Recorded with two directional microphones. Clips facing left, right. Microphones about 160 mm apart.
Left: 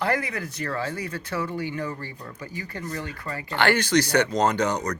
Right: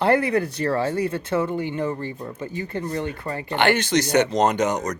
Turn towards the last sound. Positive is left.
turn(degrees=-20)  # may be behind; listen again after turning